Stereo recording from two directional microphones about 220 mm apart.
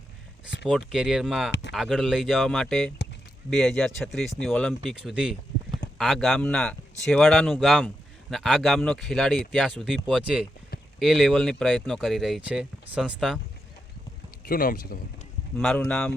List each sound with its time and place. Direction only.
0.6 s speech: centre (ahead or behind)
1.5 s speech: 50° left (ahead or behind)
1.7 s speech: centre (ahead or behind)
14.4 s speech: 40° left (ahead or behind)
15.5 s speech: 5° left (ahead or behind)